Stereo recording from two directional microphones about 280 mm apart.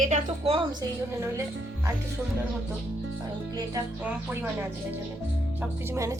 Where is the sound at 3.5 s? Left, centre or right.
Centre.